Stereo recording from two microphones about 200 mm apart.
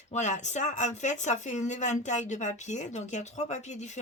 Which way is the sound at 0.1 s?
35° left (ahead or behind).